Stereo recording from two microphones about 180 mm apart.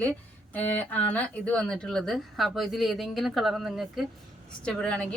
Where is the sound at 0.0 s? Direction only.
10° left (ahead or behind).